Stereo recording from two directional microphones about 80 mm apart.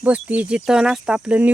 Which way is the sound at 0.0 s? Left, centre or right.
Centre.